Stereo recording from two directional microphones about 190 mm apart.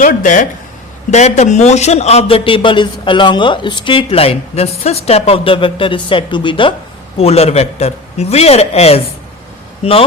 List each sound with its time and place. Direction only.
0.0 s a man's voice: 45° left (ahead or behind)